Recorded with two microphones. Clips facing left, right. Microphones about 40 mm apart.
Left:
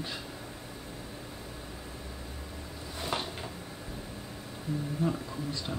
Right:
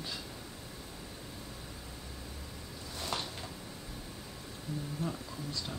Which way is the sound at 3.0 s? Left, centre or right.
Left.